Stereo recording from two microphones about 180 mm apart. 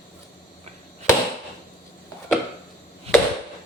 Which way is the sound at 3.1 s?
35° right (ahead or behind).